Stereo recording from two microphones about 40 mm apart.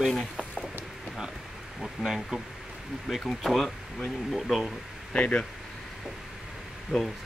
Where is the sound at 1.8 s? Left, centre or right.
Centre.